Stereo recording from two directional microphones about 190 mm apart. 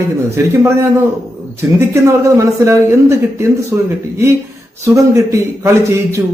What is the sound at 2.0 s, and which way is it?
A man's voice, 15° right (ahead or behind).